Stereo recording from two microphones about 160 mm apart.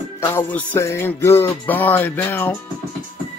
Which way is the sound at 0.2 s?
15° left (ahead or behind).